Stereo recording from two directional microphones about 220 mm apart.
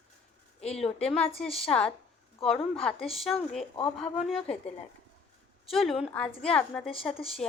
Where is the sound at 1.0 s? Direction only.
5° left (ahead or behind).